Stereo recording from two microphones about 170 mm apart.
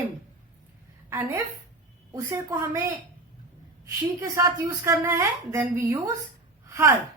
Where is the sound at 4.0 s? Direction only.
20° right (ahead or behind).